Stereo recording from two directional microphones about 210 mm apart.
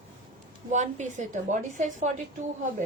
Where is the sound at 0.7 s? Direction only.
35° right (ahead or behind).